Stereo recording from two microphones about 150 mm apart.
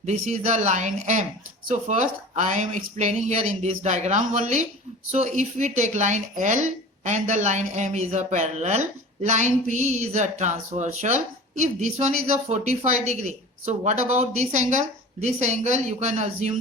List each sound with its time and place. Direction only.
0.0 s speech: 50° right (ahead or behind)